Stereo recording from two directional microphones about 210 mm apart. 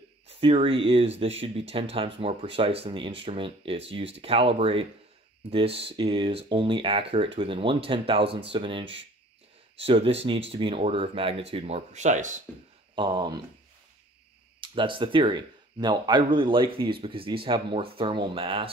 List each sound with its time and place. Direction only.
0.3 s speech: 25° right (ahead or behind)
12.9 s speech: 20° right (ahead or behind)
14.6 s speech: 25° right (ahead or behind)